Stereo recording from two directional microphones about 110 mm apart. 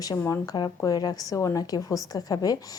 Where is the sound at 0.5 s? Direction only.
35° left (ahead or behind).